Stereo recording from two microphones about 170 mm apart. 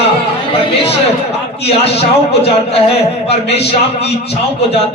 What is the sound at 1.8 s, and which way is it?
A man's voice, 35° left (ahead or behind).